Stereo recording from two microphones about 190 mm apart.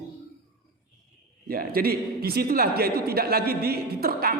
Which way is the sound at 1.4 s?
50° right (ahead or behind).